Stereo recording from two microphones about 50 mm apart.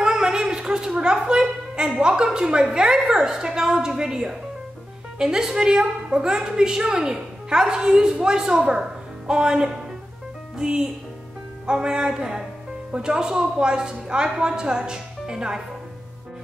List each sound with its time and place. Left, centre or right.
0.0 s a woman's voice: centre